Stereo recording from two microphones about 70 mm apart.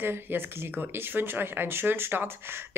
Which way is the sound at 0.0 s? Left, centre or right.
Right.